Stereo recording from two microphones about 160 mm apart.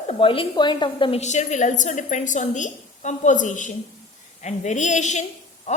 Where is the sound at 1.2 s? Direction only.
45° left (ahead or behind).